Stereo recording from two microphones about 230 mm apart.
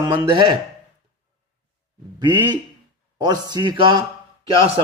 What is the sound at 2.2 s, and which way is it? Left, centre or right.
A man's voice, centre.